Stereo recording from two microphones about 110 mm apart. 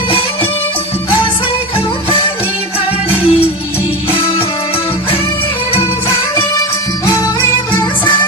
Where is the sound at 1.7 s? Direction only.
55° left (ahead or behind).